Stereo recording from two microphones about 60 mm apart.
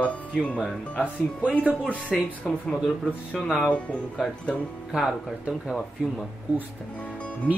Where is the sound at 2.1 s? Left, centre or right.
Centre.